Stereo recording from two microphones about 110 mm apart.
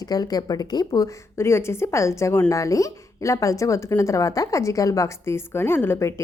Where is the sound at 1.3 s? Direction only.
25° left (ahead or behind).